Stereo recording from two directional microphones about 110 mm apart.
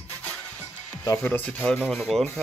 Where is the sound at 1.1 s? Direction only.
15° left (ahead or behind).